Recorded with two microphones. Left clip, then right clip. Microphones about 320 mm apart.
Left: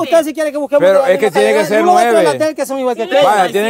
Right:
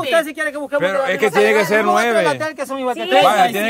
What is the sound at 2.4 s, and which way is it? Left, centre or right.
Speech, left.